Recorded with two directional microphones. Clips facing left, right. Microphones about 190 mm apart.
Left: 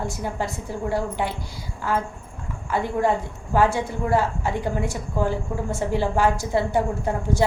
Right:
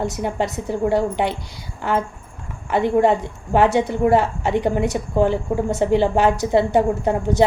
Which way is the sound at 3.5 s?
20° right (ahead or behind).